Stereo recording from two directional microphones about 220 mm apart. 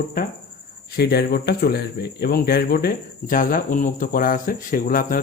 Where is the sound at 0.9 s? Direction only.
45° left (ahead or behind).